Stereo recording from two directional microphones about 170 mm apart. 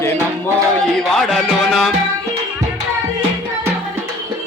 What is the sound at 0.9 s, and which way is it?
Music, centre (ahead or behind).